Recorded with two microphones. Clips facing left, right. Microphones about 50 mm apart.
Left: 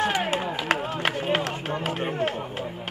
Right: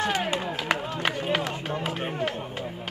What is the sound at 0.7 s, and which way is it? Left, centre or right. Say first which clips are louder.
Run: left 2 dB; left.